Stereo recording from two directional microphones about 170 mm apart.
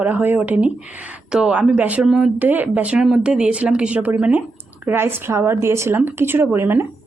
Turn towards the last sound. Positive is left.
turn(degrees=-15)  # may be behind; listen again after turning